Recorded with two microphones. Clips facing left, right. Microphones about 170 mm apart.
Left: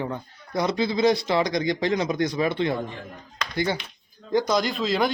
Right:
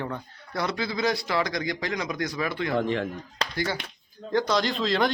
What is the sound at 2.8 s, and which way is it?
Speech, 90° right.